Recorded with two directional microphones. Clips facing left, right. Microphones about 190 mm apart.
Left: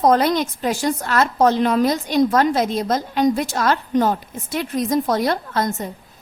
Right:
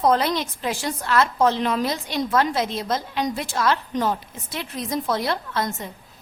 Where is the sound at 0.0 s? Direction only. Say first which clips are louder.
Left 4 dB; 45° left (ahead or behind).